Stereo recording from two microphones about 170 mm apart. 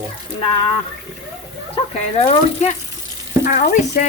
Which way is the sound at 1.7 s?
35° left (ahead or behind).